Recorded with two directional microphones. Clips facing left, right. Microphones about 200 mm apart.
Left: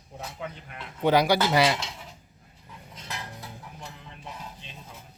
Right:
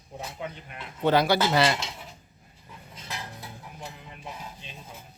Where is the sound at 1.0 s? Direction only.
15° left (ahead or behind).